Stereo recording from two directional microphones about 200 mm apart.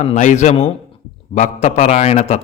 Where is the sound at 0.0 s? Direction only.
35° left (ahead or behind).